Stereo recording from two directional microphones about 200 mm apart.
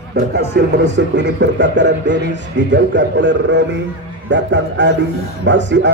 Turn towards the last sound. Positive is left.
turn(degrees=-65)  # may be behind; listen again after turning